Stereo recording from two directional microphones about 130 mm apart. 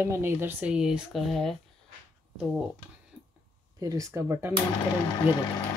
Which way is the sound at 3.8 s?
25° right (ahead or behind).